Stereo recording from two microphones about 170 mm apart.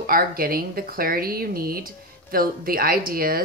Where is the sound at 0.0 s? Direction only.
60° right (ahead or behind).